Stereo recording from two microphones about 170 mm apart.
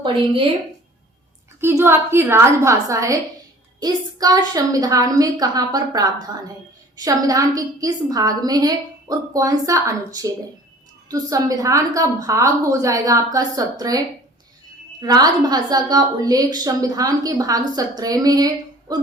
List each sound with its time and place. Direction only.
1.6 s a woman's voice: 15° right (ahead or behind)
15.0 s a woman's voice: 20° right (ahead or behind)